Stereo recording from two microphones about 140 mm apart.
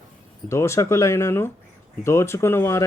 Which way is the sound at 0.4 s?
20° left (ahead or behind).